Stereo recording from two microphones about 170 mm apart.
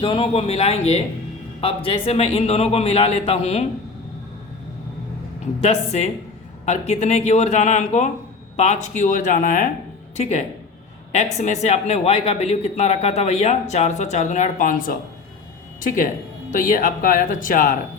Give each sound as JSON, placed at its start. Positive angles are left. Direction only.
{"t": 0.0, "sound": "speech", "side_deg": 35}
{"t": 5.5, "sound": "a man's voice", "side_deg": 35}
{"t": 10.2, "sound": "speech", "side_deg": 40}
{"t": 16.5, "sound": "a man's voice", "side_deg": 50}